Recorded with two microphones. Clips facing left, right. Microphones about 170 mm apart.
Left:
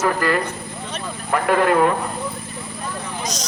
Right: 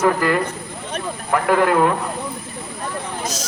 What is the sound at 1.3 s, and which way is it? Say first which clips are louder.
Speech: right 1 dB; centre (ahead or behind).